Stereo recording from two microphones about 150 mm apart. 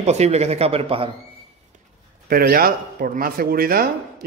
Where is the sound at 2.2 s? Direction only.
85° right.